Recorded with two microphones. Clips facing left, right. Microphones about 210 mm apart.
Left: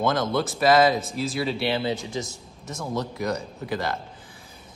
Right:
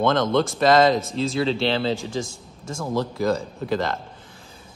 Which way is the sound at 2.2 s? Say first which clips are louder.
Right 3 dB; 50° right (ahead or behind).